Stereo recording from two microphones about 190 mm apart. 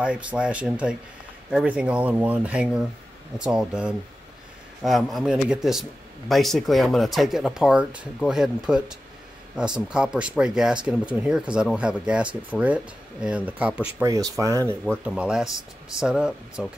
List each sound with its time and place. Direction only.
0.0 s a man's voice: 5° right (ahead or behind)
14.0 s speech: 15° right (ahead or behind)
15.0 s a man's voice: 5° right (ahead or behind)